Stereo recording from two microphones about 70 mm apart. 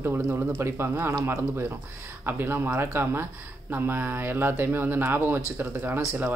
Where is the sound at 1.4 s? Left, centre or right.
Right.